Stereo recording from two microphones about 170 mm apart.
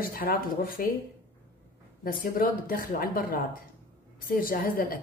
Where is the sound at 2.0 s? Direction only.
55° left (ahead or behind).